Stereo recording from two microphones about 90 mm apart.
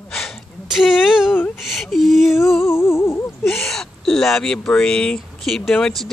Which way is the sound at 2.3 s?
30° left (ahead or behind).